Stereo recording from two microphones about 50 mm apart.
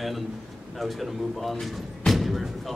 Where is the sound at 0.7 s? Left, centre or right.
Centre.